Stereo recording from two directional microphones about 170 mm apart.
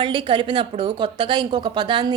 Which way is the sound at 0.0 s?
30° right (ahead or behind).